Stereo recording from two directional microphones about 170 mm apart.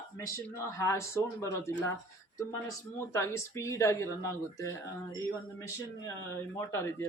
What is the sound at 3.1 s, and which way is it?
Speech, 15° left (ahead or behind).